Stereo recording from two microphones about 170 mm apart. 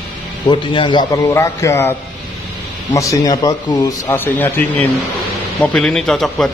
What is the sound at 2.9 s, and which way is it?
Speech, 20° left (ahead or behind).